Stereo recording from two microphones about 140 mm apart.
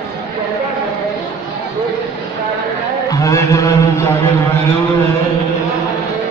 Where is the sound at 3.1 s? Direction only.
25° left (ahead or behind).